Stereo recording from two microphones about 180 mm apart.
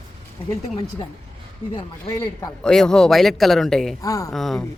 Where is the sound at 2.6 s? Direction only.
5° left (ahead or behind).